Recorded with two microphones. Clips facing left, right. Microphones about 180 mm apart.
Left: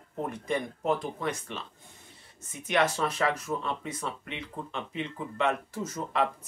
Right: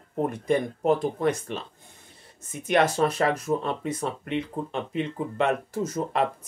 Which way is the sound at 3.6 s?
50° right (ahead or behind).